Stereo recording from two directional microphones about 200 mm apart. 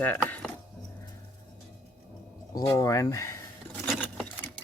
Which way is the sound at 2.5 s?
15° left (ahead or behind).